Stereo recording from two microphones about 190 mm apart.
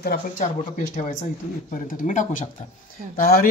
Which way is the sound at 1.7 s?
45° left (ahead or behind).